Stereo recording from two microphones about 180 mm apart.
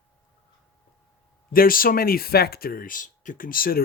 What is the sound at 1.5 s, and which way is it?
A man's voice, 50° left (ahead or behind).